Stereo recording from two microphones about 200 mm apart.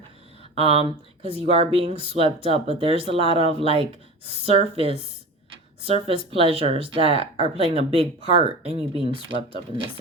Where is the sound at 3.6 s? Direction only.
30° right (ahead or behind).